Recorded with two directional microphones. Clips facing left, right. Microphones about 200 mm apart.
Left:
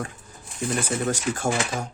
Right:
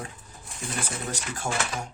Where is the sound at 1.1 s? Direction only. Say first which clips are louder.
Left 8 dB; 50° left (ahead or behind).